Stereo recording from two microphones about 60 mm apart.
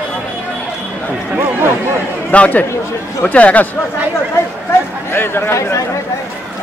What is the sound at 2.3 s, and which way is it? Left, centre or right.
Speech, left.